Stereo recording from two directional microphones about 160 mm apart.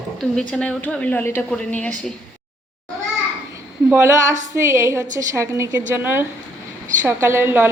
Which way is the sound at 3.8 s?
15° right (ahead or behind).